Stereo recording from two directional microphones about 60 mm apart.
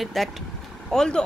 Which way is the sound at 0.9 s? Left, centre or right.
Centre.